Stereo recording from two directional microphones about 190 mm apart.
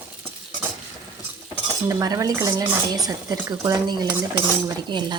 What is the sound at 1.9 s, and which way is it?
Speech, 20° right (ahead or behind).